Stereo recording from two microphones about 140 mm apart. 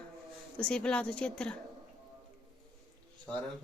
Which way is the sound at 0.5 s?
10° left (ahead or behind).